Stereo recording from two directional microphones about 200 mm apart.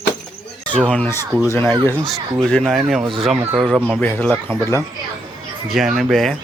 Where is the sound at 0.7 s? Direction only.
5° left (ahead or behind).